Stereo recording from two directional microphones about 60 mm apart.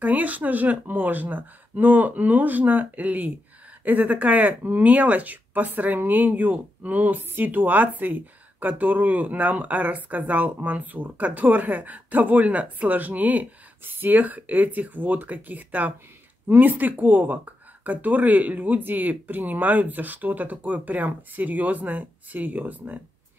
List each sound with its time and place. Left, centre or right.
0.0 s speech: right